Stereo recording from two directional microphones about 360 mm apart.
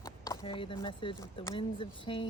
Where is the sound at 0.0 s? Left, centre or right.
Centre.